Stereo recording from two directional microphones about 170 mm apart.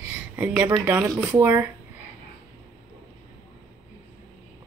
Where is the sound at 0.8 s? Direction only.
20° right (ahead or behind).